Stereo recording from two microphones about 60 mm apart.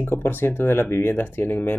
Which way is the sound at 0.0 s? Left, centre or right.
Left.